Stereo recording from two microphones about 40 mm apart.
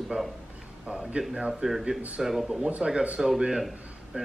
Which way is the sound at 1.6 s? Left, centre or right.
Centre.